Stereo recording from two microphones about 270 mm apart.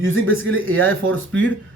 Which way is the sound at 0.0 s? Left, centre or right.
Right.